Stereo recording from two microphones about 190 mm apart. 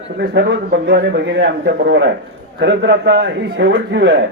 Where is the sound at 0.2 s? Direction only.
65° right (ahead or behind).